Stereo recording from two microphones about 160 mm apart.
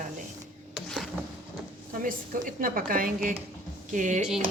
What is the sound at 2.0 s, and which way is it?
A woman's voice, 55° right (ahead or behind).